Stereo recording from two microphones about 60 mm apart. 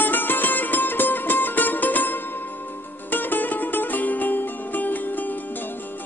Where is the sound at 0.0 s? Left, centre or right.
Left.